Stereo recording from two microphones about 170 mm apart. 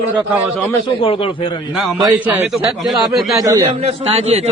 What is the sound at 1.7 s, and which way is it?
A man's voice, centre (ahead or behind).